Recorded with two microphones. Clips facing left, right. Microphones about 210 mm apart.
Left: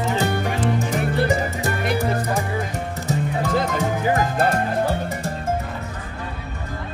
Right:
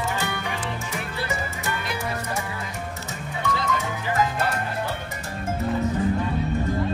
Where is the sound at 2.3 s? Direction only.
50° left (ahead or behind).